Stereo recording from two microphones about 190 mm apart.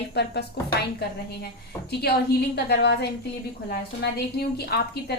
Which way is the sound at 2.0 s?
55° left (ahead or behind).